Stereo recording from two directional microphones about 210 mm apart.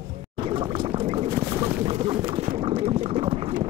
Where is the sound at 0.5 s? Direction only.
25° right (ahead or behind).